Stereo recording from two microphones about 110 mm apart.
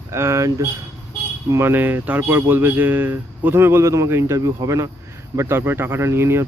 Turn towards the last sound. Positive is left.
turn(degrees=-25)  # may be behind; listen again after turning